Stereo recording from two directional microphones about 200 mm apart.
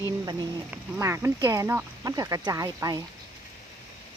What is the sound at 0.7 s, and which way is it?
Speech, 10° right (ahead or behind).